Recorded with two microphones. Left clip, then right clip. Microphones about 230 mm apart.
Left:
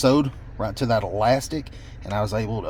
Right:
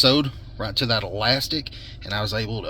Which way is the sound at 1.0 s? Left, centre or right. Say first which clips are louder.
Left 2 dB; left.